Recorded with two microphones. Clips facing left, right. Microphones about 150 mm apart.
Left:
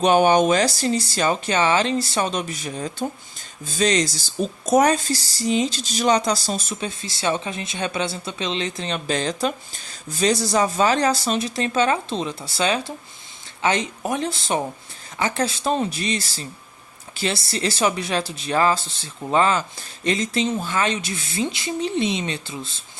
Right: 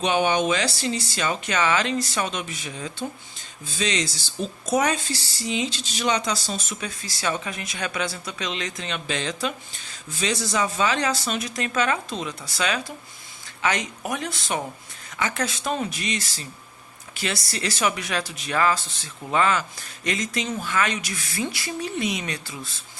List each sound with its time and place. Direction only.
0.0 s a woman's voice: 45° left (ahead or behind); by 22.8 s 25° left (ahead or behind)